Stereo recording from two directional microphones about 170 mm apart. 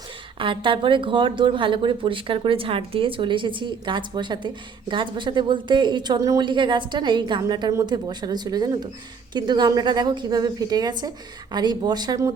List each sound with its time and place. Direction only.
0.3 s speech: 30° right (ahead or behind)